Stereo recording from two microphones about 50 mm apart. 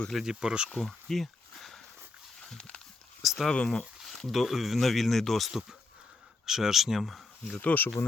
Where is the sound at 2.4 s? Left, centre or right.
Centre.